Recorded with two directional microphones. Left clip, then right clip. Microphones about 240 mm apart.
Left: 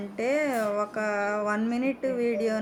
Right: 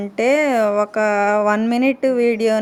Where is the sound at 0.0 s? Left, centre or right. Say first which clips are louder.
Right 10 dB; right.